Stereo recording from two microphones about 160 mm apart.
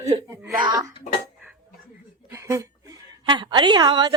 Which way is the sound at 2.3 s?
15° right (ahead or behind).